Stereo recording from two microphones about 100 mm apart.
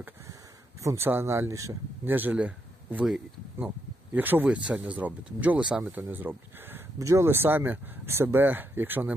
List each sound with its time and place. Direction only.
0.8 s speech: 25° right (ahead or behind)
2.0 s speech: 20° right (ahead or behind)